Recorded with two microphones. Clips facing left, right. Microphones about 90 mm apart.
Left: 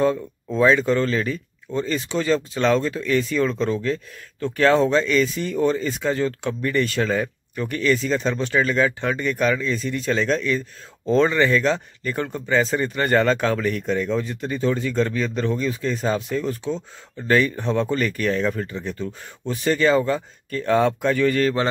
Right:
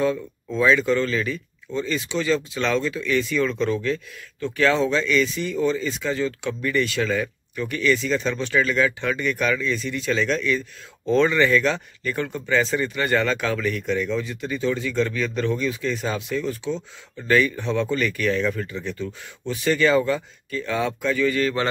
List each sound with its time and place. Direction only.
0.6 s speech: 35° left (ahead or behind)
20.4 s speech: 50° left (ahead or behind)